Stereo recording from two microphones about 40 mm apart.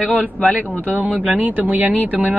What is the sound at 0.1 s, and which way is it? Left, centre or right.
Speech, right.